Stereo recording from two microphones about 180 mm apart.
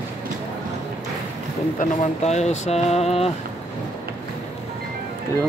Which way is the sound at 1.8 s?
40° left (ahead or behind).